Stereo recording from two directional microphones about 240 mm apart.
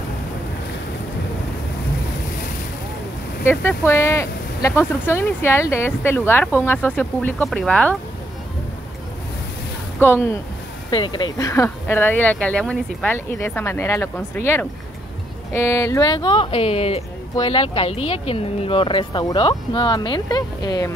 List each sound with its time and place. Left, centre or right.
3.4 s speech: centre
9.9 s speech: centre